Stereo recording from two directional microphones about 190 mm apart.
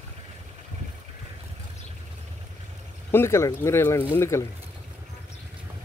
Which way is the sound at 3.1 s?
15° left (ahead or behind).